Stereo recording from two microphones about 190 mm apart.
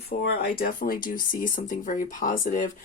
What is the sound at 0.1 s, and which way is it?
Speech, 55° left (ahead or behind).